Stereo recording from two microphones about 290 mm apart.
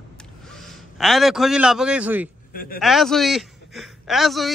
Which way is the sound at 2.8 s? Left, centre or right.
Centre.